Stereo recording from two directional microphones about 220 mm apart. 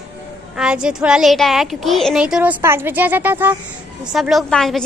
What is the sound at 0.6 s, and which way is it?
A woman's voice, 5° right (ahead or behind).